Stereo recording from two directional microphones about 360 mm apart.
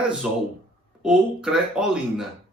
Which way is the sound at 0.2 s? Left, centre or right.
Centre.